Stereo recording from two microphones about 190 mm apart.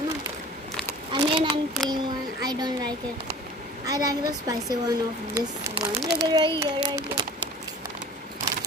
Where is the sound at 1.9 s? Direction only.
20° right (ahead or behind).